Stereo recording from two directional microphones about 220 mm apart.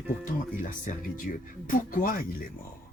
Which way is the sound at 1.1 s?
40° left (ahead or behind).